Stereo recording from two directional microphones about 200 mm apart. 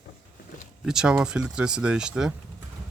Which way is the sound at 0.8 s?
5° right (ahead or behind).